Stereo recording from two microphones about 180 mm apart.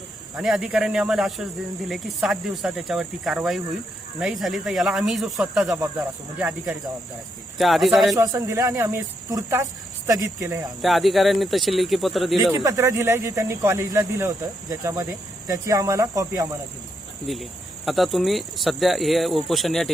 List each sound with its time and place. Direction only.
0.3 s speech: centre (ahead or behind)
7.6 s speech: centre (ahead or behind)
8.1 s speech: 20° right (ahead or behind)
10.8 s speech: centre (ahead or behind)
12.6 s speech: 15° right (ahead or behind)
17.3 s speech: centre (ahead or behind)